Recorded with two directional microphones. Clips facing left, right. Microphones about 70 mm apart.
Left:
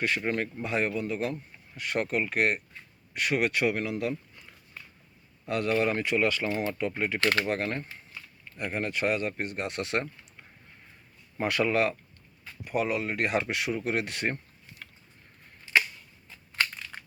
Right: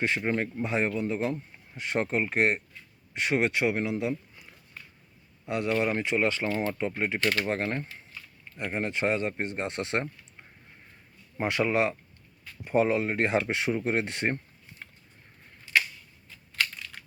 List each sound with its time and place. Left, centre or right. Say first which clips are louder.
0.0 s speech: right 1 dB; right
5.5 s speech: left 1 dB; centre
11.3 s speech: even; right